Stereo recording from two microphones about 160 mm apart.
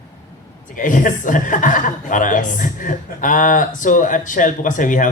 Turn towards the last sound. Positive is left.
turn(degrees=55)  # may be behind; listen again after turning